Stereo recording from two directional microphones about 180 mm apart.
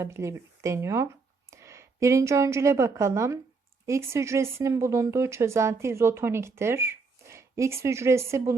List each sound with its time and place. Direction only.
0.0 s a woman's voice: 15° right (ahead or behind)